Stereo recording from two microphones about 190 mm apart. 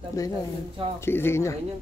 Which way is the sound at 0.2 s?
15° left (ahead or behind).